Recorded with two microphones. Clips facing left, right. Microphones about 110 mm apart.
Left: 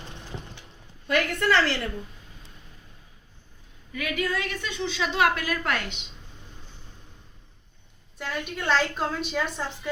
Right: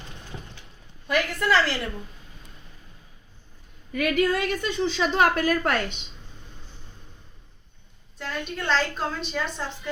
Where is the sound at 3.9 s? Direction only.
55° right (ahead or behind).